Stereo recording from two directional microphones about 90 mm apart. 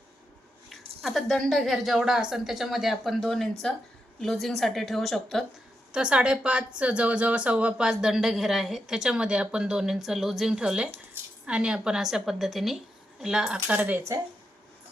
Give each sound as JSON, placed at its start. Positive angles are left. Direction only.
{"t": 0.7, "sound": "a woman's voice", "side_deg": 0}
{"t": 5.9, "sound": "a woman's voice", "side_deg": -10}
{"t": 13.7, "sound": "speech", "side_deg": -20}